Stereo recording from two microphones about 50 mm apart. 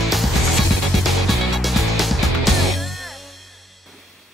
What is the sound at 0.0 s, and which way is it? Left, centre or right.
Music, centre.